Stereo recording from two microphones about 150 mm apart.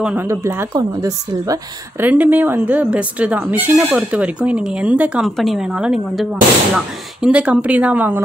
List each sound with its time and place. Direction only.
0.0 s a woman's voice: 10° right (ahead or behind)
2.0 s speech: 10° right (ahead or behind)